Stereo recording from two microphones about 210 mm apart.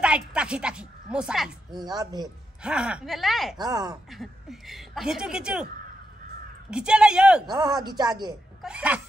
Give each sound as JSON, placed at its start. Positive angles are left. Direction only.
{"t": 0.0, "sound": "speech", "side_deg": -5}
{"t": 1.7, "sound": "speech", "side_deg": -20}
{"t": 2.6, "sound": "speech", "side_deg": -5}
{"t": 3.5, "sound": "speech", "side_deg": -20}
{"t": 4.1, "sound": "speech", "side_deg": 0}
{"t": 6.7, "sound": "speech", "side_deg": -5}
{"t": 7.4, "sound": "speech", "side_deg": -20}
{"t": 8.6, "sound": "speech", "side_deg": -5}